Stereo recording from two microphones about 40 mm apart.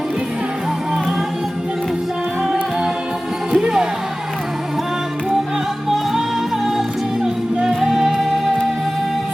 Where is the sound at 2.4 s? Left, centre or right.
Centre.